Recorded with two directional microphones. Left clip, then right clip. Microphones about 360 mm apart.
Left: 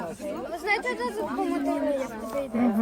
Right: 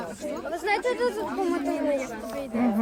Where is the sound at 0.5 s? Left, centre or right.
Right.